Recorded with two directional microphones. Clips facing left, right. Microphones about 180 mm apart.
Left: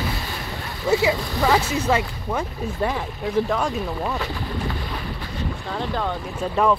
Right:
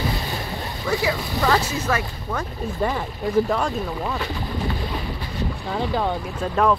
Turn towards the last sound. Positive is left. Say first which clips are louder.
# even
turn(degrees=5)  # may be behind; listen again after turning